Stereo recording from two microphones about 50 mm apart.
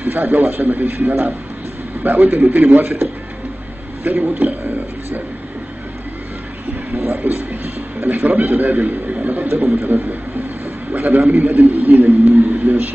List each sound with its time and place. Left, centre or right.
0.0 s a man's voice: right
4.0 s a man's voice: right
6.9 s a man's voice: right